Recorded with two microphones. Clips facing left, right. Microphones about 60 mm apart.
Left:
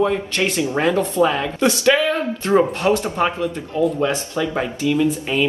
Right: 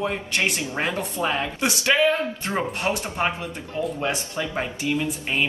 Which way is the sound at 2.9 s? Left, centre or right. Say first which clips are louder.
Left 9 dB; left.